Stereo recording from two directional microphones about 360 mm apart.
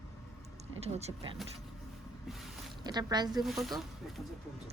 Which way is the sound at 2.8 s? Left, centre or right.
Centre.